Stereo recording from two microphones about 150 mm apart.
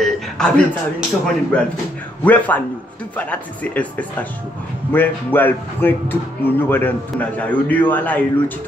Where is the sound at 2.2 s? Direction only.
10° left (ahead or behind).